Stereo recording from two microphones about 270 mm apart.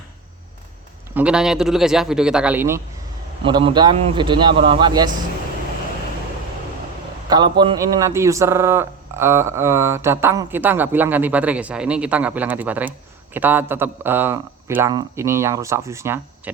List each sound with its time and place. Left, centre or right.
1.1 s a man's voice: centre
7.3 s a man's voice: centre